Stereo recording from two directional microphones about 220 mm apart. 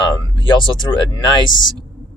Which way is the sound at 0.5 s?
20° left (ahead or behind).